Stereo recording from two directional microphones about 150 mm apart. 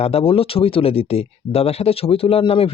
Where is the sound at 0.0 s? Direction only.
40° left (ahead or behind).